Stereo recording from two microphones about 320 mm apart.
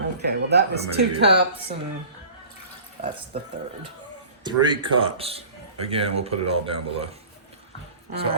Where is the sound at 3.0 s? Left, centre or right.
Right.